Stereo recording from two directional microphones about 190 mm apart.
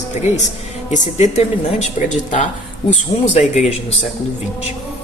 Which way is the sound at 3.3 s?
35° left (ahead or behind).